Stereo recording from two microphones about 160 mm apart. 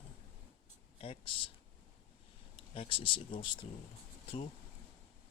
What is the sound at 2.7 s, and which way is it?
Speech, 35° left (ahead or behind).